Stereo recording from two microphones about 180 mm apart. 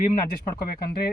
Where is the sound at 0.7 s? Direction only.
60° left (ahead or behind).